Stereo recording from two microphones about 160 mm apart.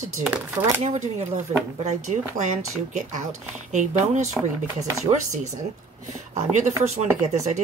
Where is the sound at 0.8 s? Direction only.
45° right (ahead or behind).